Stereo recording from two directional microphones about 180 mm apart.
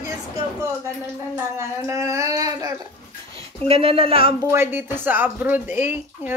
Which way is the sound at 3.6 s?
30° right (ahead or behind).